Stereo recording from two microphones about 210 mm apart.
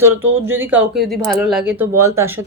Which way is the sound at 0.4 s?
10° right (ahead or behind).